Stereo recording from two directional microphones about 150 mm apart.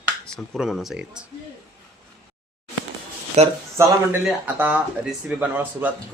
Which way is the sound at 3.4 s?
50° right (ahead or behind).